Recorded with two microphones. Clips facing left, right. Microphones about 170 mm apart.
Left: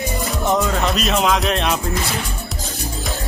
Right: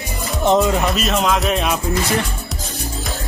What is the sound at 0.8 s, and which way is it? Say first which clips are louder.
Speech: even; centre (ahead or behind).